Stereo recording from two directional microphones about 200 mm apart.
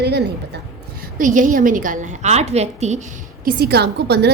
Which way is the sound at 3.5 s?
50° right (ahead or behind).